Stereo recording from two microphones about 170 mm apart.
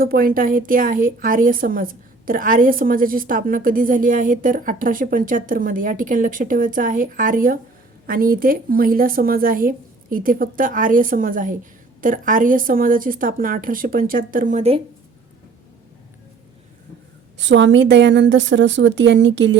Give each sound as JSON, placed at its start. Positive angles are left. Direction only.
{"t": 0.0, "sound": "a woman's voice", "side_deg": -60}
{"t": 17.3, "sound": "a woman's voice", "side_deg": -90}